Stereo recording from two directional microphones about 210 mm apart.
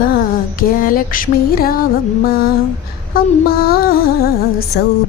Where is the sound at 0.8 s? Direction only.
40° left (ahead or behind).